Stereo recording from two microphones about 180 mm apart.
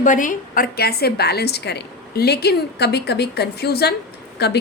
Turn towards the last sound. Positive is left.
turn(degrees=65)  # may be behind; listen again after turning